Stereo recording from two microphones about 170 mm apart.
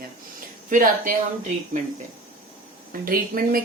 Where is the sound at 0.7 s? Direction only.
50° right (ahead or behind).